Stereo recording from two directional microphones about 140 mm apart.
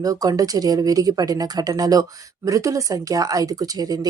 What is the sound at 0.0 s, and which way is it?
Speech, 25° right (ahead or behind).